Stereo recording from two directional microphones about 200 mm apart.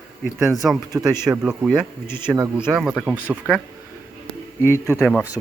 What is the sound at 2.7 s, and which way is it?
Speech, 5° right (ahead or behind).